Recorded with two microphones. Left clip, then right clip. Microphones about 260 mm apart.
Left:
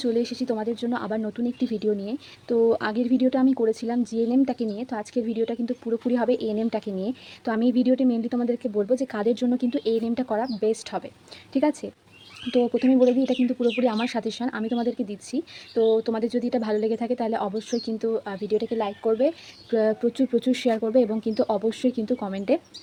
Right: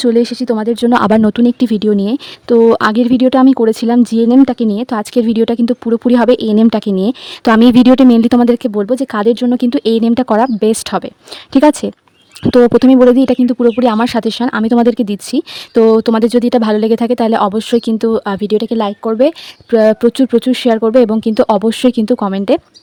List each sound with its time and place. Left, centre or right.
0.0 s speech: right